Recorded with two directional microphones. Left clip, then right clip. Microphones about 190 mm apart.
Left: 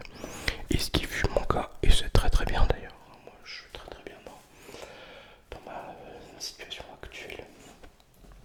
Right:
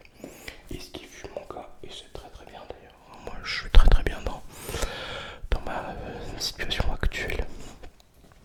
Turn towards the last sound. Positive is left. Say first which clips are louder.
# right 10 dB
turn(degrees=-35)  # may be behind; listen again after turning